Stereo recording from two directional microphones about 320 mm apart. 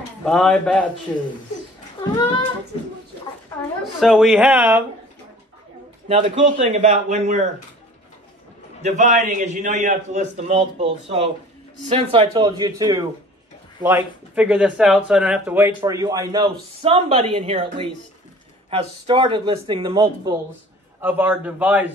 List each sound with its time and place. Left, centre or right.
0.2 s speech: centre
3.8 s speech: centre
6.0 s a man's voice: centre
8.8 s a man's voice: right; by 21.9 s centre